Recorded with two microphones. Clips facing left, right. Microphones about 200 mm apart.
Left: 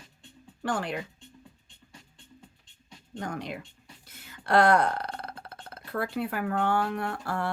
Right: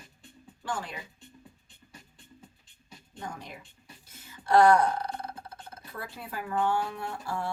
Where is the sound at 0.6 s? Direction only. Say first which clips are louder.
Left 6 dB; 65° left (ahead or behind).